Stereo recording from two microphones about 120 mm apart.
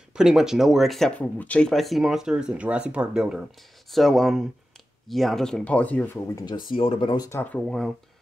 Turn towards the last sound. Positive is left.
turn(degrees=5)  # may be behind; listen again after turning